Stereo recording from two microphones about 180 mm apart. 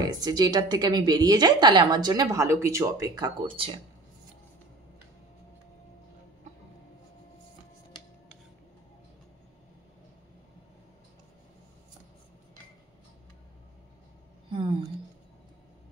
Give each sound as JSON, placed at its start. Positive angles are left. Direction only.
{"t": 0.0, "sound": "a woman's voice", "side_deg": -20}
{"t": 14.5, "sound": "a woman's voice", "side_deg": -25}